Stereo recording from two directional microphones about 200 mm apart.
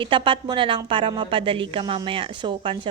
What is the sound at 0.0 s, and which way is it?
A woman's voice, 25° right (ahead or behind).